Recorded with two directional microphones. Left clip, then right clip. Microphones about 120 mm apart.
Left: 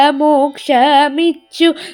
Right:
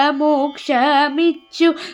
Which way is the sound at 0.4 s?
25° left (ahead or behind).